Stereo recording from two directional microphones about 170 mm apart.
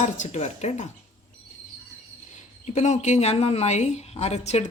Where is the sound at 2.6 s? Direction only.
40° left (ahead or behind).